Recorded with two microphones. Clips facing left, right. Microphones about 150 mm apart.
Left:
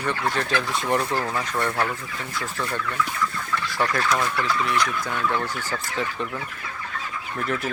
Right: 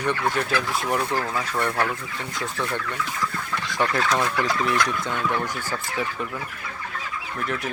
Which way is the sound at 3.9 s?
20° right (ahead or behind).